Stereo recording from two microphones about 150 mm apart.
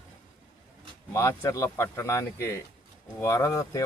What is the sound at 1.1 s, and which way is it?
Speech, 20° left (ahead or behind).